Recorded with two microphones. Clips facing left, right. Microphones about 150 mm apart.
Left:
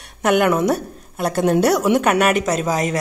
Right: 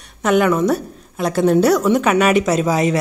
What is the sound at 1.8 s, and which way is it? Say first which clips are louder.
Speech: right 1 dB; 5° left (ahead or behind).